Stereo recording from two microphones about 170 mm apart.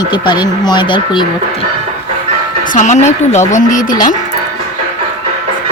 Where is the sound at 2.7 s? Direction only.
45° left (ahead or behind).